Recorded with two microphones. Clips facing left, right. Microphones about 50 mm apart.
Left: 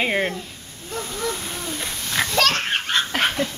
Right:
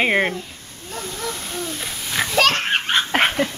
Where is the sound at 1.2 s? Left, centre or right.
Centre.